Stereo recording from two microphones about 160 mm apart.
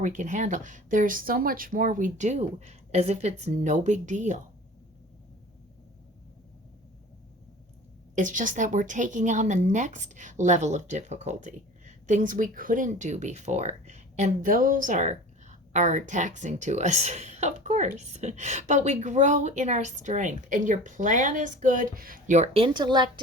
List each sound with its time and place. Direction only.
0.0 s a woman's voice: 50° right (ahead or behind)
8.1 s a woman's voice: 55° right (ahead or behind)
22.6 s speech: 30° right (ahead or behind)